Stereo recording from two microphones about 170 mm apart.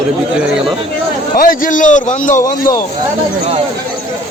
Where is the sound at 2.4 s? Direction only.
20° left (ahead or behind).